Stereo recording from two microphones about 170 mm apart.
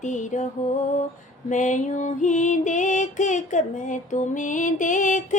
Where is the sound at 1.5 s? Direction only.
45° left (ahead or behind).